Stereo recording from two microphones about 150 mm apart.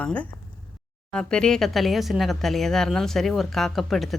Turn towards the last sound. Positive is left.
turn(degrees=0)  # may be behind; listen again after turning